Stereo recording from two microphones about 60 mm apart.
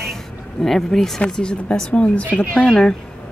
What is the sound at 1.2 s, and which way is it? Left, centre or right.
Speech, centre.